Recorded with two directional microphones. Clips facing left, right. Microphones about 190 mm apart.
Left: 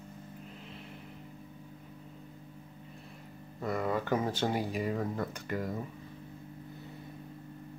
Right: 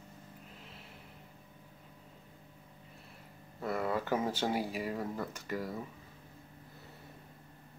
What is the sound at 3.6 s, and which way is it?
Speech, 5° right (ahead or behind).